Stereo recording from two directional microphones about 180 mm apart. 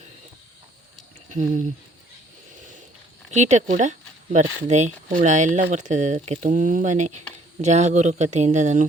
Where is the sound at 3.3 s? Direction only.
40° right (ahead or behind).